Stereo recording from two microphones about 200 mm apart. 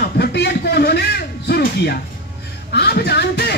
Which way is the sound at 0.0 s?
55° left (ahead or behind).